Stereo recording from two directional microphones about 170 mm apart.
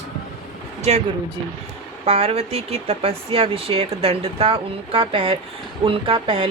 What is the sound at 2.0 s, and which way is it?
Speech, 35° right (ahead or behind).